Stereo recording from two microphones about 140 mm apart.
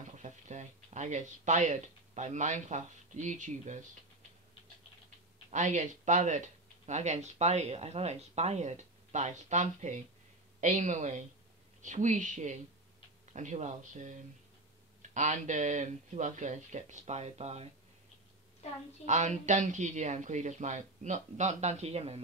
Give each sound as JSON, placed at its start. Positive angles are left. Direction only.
{"t": 0.2, "sound": "speech", "side_deg": -55}
{"t": 5.5, "sound": "speech", "side_deg": -60}
{"t": 18.6, "sound": "a woman's voice", "side_deg": 50}
{"t": 19.0, "sound": "speech", "side_deg": -55}